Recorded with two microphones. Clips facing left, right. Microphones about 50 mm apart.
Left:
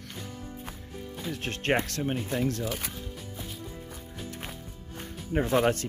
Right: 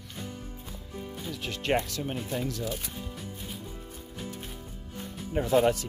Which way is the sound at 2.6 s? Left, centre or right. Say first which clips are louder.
Left 1 dB; left.